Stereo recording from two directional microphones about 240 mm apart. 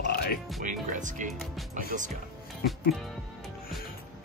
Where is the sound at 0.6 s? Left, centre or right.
Right.